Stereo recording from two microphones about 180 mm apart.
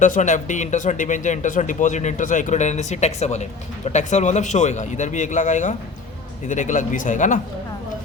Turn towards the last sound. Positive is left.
turn(degrees=45)  # may be behind; listen again after turning